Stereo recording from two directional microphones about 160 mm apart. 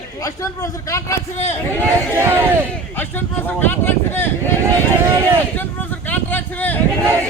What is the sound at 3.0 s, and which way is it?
Speech, 10° left (ahead or behind).